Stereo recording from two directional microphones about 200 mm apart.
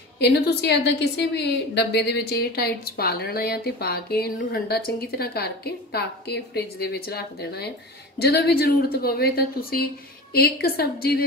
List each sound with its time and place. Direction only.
0.2 s a woman's voice: 55° left (ahead or behind)